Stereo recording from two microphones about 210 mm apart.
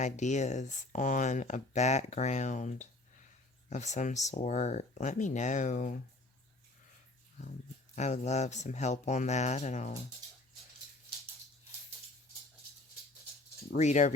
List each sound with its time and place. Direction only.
0.0 s speech: 35° left (ahead or behind)
7.9 s speech: 35° left (ahead or behind)
13.7 s speech: 35° left (ahead or behind)